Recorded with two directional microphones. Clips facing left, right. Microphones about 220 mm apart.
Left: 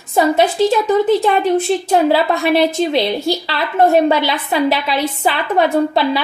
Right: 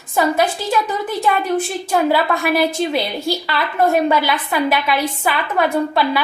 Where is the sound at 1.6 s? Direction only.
25° left (ahead or behind).